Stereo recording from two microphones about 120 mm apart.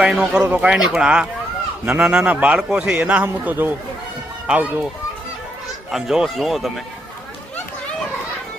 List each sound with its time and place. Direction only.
0.0 s a man's voice: 5° right (ahead or behind)
5.9 s speech: 5° right (ahead or behind)